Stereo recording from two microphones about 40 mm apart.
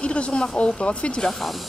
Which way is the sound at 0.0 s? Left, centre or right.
Left.